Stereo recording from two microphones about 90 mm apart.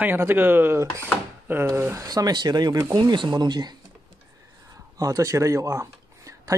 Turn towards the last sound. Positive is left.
turn(degrees=-35)  # may be behind; listen again after turning